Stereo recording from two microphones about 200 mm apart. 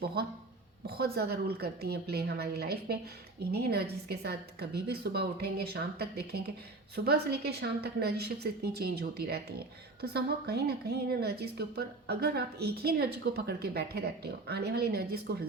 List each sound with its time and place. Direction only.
0.0 s a woman's voice: 50° right (ahead or behind)